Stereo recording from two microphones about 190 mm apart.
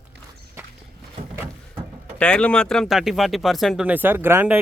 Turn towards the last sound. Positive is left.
turn(degrees=-10)  # may be behind; listen again after turning